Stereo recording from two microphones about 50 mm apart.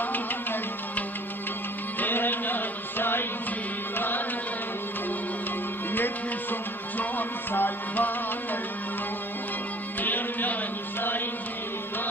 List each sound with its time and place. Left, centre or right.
0.0 s music: left
5.9 s music: left
9.9 s music: left